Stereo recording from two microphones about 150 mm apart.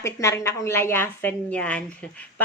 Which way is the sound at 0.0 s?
20° left (ahead or behind).